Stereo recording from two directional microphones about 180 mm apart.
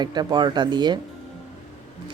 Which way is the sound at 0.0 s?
25° right (ahead or behind).